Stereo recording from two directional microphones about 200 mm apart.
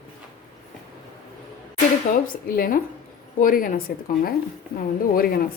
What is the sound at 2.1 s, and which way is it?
Speech, 45° left (ahead or behind).